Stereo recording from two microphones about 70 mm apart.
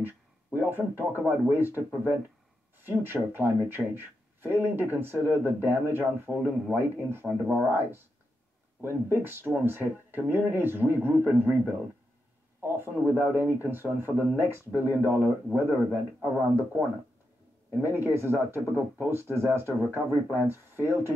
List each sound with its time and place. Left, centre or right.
0.0 s a sound: right
1.5 s speech: right
7.2 s speech: centre
7.6 s speech: right
17.7 s speech: right